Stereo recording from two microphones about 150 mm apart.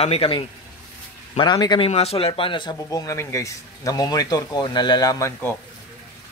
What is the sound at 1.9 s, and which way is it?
Speech, 45° left (ahead or behind).